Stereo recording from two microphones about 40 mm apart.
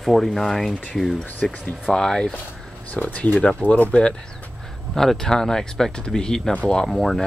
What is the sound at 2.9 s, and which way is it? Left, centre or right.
Speech, left.